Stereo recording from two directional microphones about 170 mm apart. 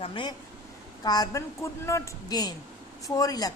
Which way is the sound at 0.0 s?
30° left (ahead or behind).